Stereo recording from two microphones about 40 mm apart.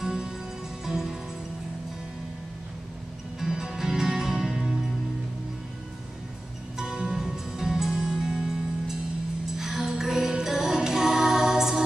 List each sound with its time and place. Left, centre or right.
0.0 s music: centre
3.3 s music: centre
6.8 s music: centre